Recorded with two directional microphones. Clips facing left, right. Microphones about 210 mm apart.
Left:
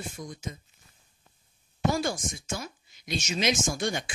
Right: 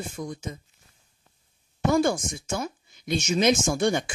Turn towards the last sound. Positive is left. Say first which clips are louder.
# right 6 dB
turn(degrees=-55)  # may be behind; listen again after turning